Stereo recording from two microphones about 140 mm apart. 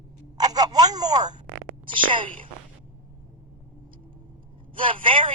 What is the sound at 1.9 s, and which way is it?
Speech, 35° right (ahead or behind).